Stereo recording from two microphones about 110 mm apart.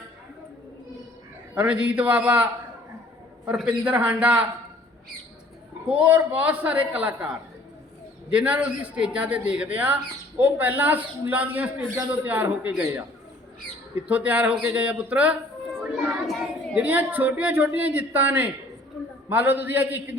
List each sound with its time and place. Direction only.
1.5 s a woman's voice: 10° right (ahead or behind)
5.9 s a woman's voice: 15° right (ahead or behind)
8.3 s a woman's voice: 10° right (ahead or behind)
15.8 s child singing: 15° right (ahead or behind)
16.2 s child singing: centre (ahead or behind)
16.7 s a woman's voice: 15° right (ahead or behind)